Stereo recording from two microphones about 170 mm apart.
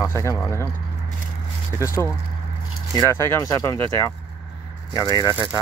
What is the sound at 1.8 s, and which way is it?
Speech, 15° left (ahead or behind).